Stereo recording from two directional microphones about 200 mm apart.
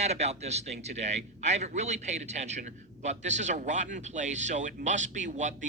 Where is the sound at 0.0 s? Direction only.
35° right (ahead or behind).